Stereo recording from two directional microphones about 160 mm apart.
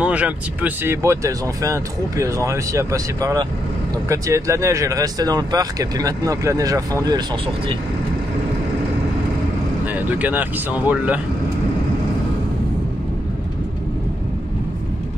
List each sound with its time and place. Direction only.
0.0 s speech: 10° right (ahead or behind); by 7.2 s 25° right (ahead or behind)
9.9 s speech: 10° right (ahead or behind)